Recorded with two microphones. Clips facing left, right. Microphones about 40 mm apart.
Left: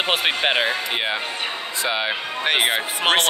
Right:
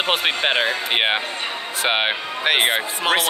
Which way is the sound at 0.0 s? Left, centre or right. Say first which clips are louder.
Even; centre.